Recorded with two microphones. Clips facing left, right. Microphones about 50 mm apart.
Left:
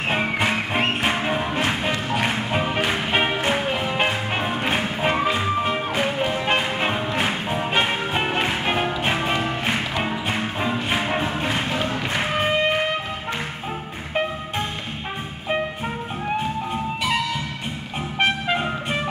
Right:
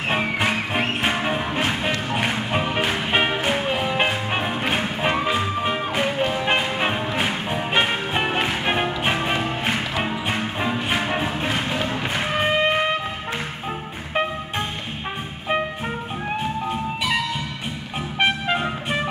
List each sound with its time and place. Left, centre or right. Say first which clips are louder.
1.0 s music: even; centre
5.6 s music: even; centre
18.2 s music: even; centre